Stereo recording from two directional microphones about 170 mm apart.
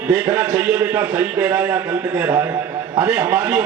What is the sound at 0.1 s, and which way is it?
A man's voice, 5° right (ahead or behind).